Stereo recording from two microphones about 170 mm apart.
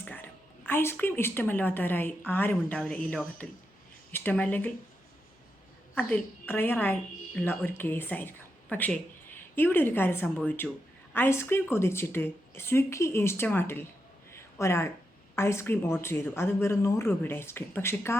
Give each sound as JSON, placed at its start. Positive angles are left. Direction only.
{"t": 0.0, "sound": "speech", "side_deg": 10}
{"t": 5.9, "sound": "a woman's voice", "side_deg": 10}
{"t": 10.2, "sound": "speech", "side_deg": 0}
{"t": 11.1, "sound": "speech", "side_deg": 15}
{"t": 14.3, "sound": "a sound", "side_deg": 15}
{"t": 15.4, "sound": "speech", "side_deg": 15}